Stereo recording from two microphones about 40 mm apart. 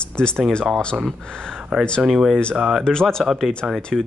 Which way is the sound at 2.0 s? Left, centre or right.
Centre.